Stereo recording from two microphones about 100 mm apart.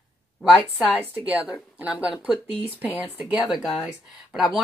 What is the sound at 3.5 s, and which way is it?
Speech, 5° right (ahead or behind).